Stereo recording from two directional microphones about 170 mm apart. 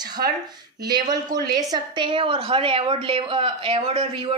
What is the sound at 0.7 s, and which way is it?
A woman's voice, 25° right (ahead or behind).